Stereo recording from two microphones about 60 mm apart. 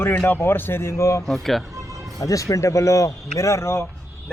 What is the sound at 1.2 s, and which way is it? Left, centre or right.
Speech, centre.